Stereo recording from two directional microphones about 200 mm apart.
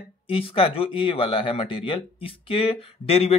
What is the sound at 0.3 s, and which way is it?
Speech, 25° left (ahead or behind).